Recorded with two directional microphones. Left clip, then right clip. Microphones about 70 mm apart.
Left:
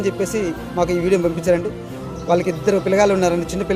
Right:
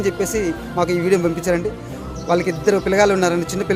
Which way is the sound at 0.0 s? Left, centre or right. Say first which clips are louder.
Right 1 dB; right.